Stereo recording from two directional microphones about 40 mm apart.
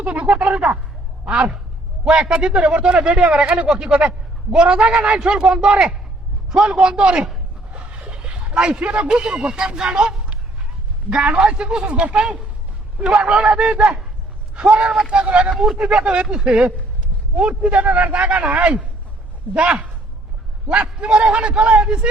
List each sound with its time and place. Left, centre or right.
0.0 s a man's voice: right
15.5 s speech: centre
15.9 s a man's voice: right
17.7 s a man's voice: right
21.0 s a man's voice: right